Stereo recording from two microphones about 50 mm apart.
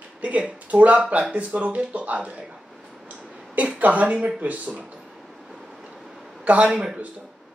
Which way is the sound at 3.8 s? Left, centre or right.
Right.